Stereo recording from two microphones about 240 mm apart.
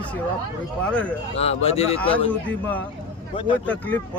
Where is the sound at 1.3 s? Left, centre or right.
Left.